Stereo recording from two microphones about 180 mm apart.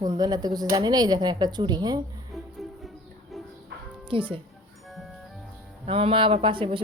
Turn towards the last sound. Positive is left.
turn(degrees=-30)  # may be behind; listen again after turning